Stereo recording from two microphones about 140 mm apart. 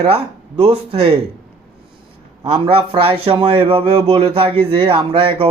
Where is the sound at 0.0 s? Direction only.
45° right (ahead or behind).